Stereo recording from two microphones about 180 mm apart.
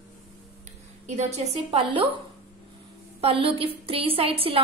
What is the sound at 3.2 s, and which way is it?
A woman's voice, 30° right (ahead or behind).